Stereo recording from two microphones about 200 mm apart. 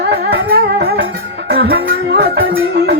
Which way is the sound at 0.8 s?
50° right (ahead or behind).